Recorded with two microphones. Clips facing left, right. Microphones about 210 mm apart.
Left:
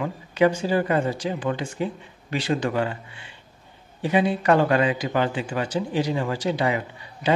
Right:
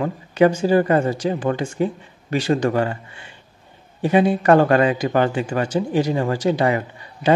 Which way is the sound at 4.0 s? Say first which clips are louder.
Right 5 dB; 50° right (ahead or behind).